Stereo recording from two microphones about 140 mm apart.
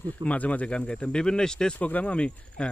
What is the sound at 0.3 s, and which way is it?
Speech, 10° left (ahead or behind).